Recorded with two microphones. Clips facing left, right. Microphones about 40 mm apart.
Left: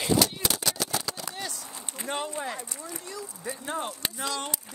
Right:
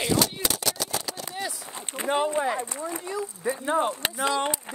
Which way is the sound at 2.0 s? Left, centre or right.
Centre.